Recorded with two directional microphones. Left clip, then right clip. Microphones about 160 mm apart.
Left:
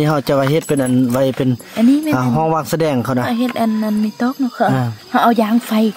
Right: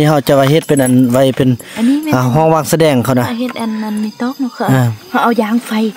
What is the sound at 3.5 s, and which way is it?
Speech, 35° left (ahead or behind).